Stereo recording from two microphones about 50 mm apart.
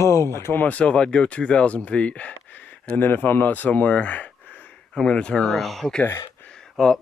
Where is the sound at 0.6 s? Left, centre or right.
Left.